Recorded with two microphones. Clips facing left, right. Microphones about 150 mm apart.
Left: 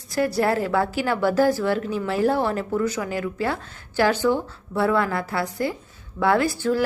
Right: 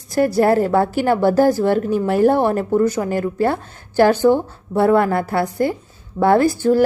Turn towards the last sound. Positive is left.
turn(degrees=-45)  # may be behind; listen again after turning